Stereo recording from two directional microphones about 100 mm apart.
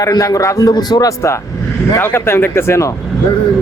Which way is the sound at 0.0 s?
35° left (ahead or behind).